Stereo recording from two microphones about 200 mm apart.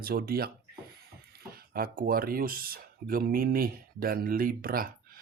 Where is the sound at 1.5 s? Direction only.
45° right (ahead or behind).